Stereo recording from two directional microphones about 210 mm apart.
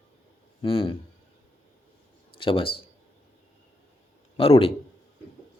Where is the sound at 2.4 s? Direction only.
25° left (ahead or behind).